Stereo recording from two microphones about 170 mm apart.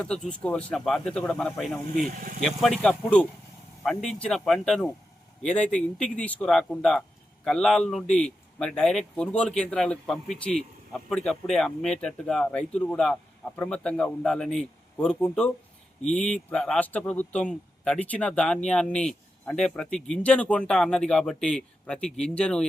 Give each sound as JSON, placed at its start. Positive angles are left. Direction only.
{"t": 0.0, "sound": "speech", "side_deg": 5}
{"t": 2.0, "sound": "speech", "side_deg": -55}
{"t": 2.4, "sound": "speech", "side_deg": 0}